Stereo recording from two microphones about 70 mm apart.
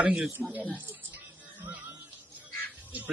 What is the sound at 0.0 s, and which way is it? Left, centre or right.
Speech, centre.